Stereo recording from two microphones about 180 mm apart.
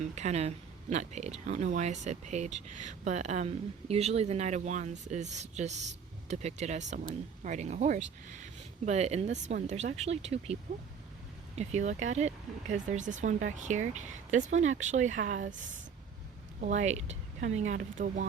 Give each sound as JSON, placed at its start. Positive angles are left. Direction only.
{"t": 0.2, "sound": "speech", "side_deg": -35}